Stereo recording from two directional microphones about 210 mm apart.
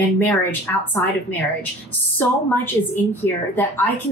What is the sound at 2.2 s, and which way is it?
Speech, 10° left (ahead or behind).